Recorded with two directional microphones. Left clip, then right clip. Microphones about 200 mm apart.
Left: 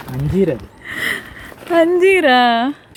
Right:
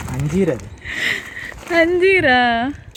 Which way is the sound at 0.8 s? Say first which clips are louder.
Even; 10° left (ahead or behind).